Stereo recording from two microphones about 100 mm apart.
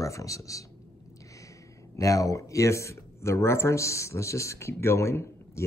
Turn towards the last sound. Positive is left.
turn(degrees=30)  # may be behind; listen again after turning